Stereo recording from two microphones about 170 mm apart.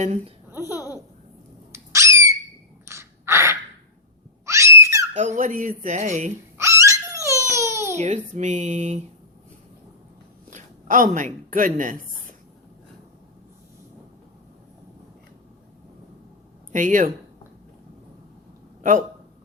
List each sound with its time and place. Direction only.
0.0 s speech: 40° right (ahead or behind)
0.6 s babbling: 20° left (ahead or behind)
1.7 s a sound: 15° right (ahead or behind)
5.1 s speech: 45° right (ahead or behind)
6.6 s dog: 15° right (ahead or behind)
7.9 s speech: 45° right (ahead or behind)
10.5 s speech: 50° right (ahead or behind)
16.7 s speech: 50° right (ahead or behind)
18.8 s a man's voice: 50° right (ahead or behind)